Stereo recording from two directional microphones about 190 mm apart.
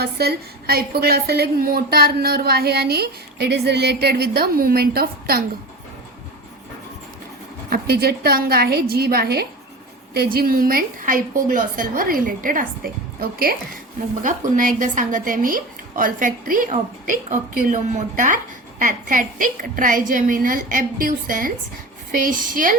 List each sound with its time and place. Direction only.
0.0 s a woman's voice: 60° right (ahead or behind)
7.7 s a woman's voice: 55° right (ahead or behind)
18.8 s a woman's voice: 45° right (ahead or behind)